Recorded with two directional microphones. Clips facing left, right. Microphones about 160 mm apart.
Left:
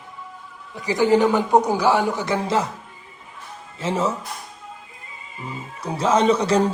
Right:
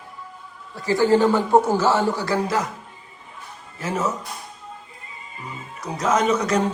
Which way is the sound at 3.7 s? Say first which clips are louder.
Left 2 dB; 25° left (ahead or behind).